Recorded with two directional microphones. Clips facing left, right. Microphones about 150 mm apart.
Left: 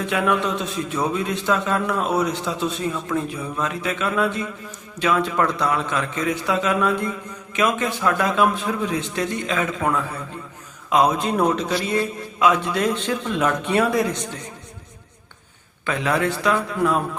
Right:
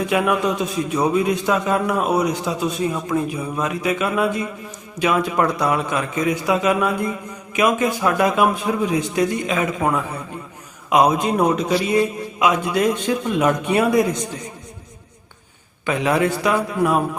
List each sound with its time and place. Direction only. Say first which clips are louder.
0.1 s a man's voice: right 1 dB; 10° right (ahead or behind)
15.9 s a man's voice: right 3 dB; 20° right (ahead or behind)